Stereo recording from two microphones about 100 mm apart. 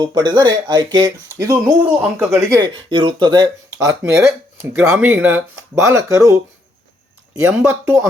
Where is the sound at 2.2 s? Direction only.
25° right (ahead or behind).